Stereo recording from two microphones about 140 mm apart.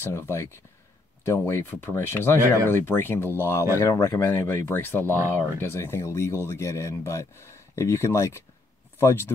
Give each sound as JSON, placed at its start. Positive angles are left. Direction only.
{"t": 0.0, "sound": "speech", "side_deg": 15}